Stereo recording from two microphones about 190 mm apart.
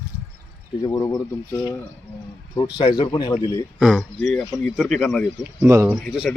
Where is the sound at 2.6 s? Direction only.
25° left (ahead or behind).